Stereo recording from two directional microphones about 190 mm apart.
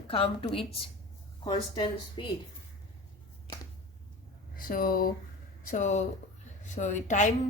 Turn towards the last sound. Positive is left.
turn(degrees=40)  # may be behind; listen again after turning